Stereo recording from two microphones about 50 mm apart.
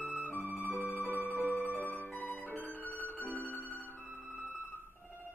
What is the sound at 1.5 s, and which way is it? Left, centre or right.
Music, left.